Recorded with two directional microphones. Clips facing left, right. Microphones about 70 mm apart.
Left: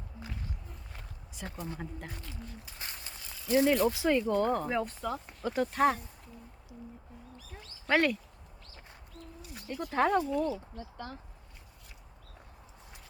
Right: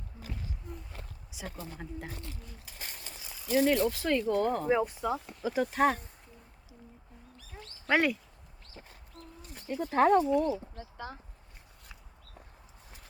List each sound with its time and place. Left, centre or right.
1.3 s speech: centre
3.2 s a sound: centre
3.8 s speech: centre
4.7 s speech: centre
7.6 s a sound: centre
9.6 s speech: right
9.9 s speech: centre